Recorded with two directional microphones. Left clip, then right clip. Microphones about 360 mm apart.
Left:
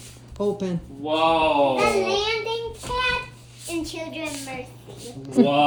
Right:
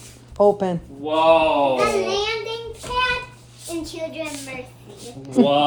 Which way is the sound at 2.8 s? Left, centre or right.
Centre.